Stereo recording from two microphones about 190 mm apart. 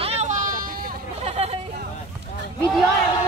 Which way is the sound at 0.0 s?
35° right (ahead or behind).